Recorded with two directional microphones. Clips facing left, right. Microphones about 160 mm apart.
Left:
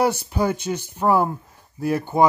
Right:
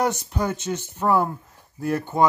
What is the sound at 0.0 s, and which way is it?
Speech, 10° left (ahead or behind).